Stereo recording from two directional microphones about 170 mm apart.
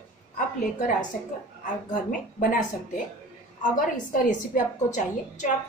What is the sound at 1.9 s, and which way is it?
Speech, 55° left (ahead or behind).